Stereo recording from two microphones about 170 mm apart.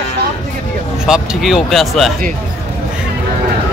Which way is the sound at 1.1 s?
Centre (ahead or behind).